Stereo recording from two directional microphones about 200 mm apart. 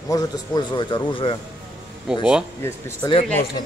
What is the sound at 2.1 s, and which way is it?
Speech, 5° right (ahead or behind).